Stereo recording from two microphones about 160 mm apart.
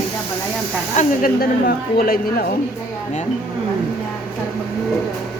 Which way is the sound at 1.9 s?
65° left (ahead or behind).